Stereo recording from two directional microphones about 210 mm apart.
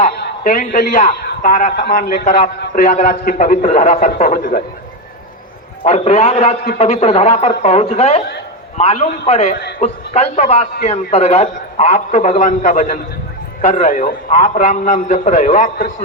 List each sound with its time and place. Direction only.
0.2 s a man's voice: 40° left (ahead or behind)
1.7 s a man's voice: 50° left (ahead or behind)
5.8 s a man's voice: 30° left (ahead or behind)